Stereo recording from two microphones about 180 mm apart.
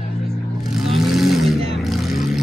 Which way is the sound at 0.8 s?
Centre (ahead or behind).